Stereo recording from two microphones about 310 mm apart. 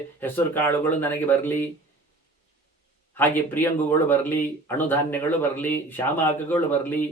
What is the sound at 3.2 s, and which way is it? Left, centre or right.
Speech, centre.